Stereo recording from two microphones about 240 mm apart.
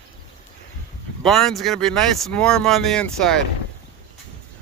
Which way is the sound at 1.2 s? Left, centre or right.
Centre.